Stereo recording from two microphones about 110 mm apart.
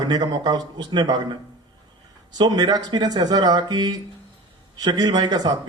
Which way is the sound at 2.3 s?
40° right (ahead or behind).